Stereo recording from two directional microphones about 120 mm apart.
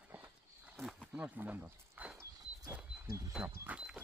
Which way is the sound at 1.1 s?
10° right (ahead or behind).